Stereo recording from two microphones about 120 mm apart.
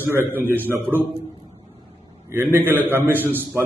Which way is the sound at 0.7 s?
20° right (ahead or behind).